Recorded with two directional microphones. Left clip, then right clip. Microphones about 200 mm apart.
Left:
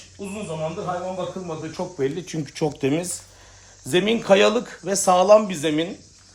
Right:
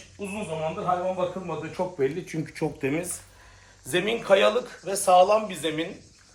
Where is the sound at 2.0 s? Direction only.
30° left (ahead or behind).